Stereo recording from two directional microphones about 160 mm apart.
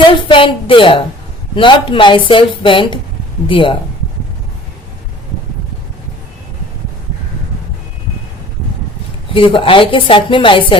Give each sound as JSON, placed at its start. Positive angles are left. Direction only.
{"t": 0.1, "sound": "speech", "side_deg": 30}
{"t": 9.3, "sound": "speech", "side_deg": 35}